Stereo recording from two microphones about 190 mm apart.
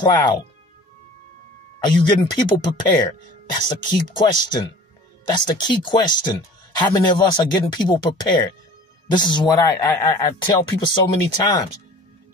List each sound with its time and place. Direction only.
0.0 s speech: 20° left (ahead or behind)
1.8 s speech: 25° left (ahead or behind)